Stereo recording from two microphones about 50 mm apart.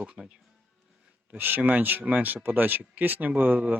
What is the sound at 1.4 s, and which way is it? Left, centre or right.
Speech, right.